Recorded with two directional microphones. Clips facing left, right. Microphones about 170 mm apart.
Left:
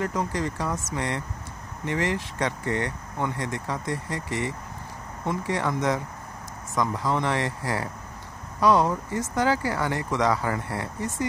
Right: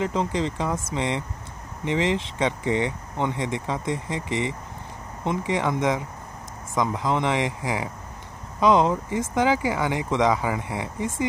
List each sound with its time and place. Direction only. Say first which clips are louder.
0.0 s speech: right 3 dB; 20° right (ahead or behind)